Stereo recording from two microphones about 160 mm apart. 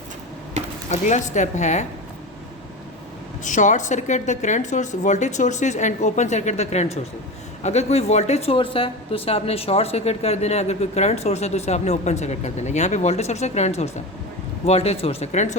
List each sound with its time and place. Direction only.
0.9 s a woman's voice: 50° left (ahead or behind)
3.4 s a woman's voice: 50° left (ahead or behind)